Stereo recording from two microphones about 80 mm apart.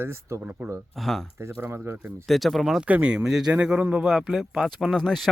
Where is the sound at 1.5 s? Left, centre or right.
Right.